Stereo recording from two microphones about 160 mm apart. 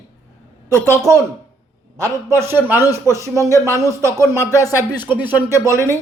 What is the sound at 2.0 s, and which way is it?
A man's voice, 20° right (ahead or behind).